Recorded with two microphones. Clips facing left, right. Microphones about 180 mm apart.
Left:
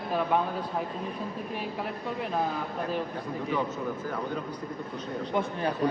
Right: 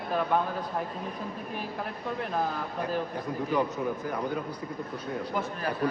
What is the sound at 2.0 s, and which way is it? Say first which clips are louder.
Speech: right 1 dB; centre (ahead or behind).